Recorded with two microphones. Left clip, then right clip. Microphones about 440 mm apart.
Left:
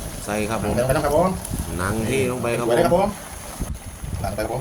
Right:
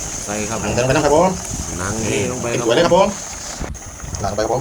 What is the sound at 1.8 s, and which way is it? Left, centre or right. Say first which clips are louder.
Speech: right 1 dB; centre.